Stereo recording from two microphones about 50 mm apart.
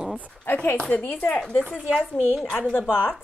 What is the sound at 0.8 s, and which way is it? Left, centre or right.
Speech, left.